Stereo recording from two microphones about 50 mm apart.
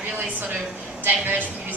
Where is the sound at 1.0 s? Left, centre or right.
Right.